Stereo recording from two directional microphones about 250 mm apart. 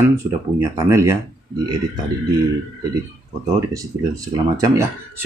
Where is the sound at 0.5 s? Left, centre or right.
Centre.